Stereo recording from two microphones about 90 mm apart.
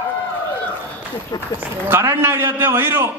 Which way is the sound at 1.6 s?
25° right (ahead or behind).